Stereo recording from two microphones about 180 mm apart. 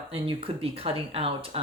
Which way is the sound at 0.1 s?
30° right (ahead or behind).